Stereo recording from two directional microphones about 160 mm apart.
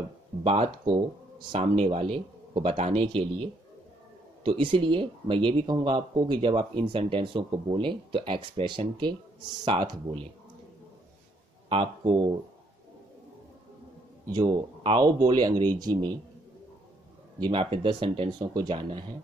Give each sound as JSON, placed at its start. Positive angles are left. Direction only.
{"t": 0.4, "sound": "speech", "side_deg": -40}
{"t": 0.7, "sound": "speech", "side_deg": -25}
{"t": 1.5, "sound": "speech", "side_deg": -35}
{"t": 4.5, "sound": "speech", "side_deg": -30}
{"t": 11.7, "sound": "speech", "side_deg": -30}
{"t": 14.3, "sound": "speech", "side_deg": -25}
{"t": 14.8, "sound": "speech", "side_deg": -35}
{"t": 15.0, "sound": "speech", "side_deg": -25}
{"t": 17.4, "sound": "speech", "side_deg": -35}